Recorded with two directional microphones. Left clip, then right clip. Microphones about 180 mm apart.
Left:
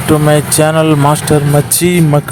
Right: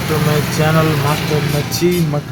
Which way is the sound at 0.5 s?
50° left (ahead or behind).